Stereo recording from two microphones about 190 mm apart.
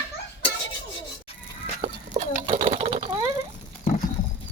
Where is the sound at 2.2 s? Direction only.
35° right (ahead or behind).